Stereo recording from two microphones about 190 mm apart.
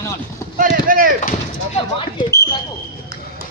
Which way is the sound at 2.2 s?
15° left (ahead or behind).